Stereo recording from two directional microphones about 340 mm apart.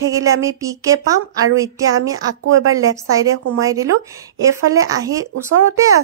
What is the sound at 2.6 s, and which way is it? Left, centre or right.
Speech, right.